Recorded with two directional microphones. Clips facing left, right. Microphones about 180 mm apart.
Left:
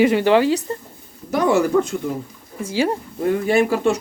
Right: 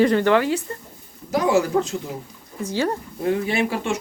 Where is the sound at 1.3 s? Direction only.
55° left (ahead or behind).